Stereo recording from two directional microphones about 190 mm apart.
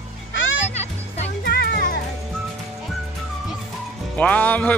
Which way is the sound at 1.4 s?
55° left (ahead or behind).